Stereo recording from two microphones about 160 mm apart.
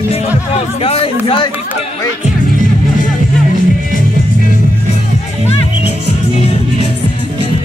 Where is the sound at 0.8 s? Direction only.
35° left (ahead or behind).